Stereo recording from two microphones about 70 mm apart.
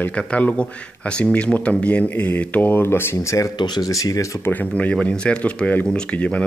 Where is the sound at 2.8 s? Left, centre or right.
Left.